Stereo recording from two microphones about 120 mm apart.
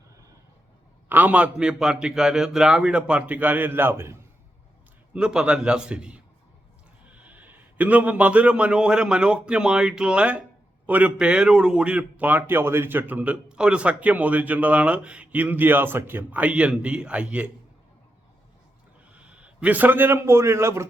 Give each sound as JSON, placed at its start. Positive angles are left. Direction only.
{"t": 1.0, "sound": "a man's voice", "side_deg": -15}
{"t": 5.1, "sound": "a man's voice", "side_deg": -5}
{"t": 19.1, "sound": "a man's voice", "side_deg": -10}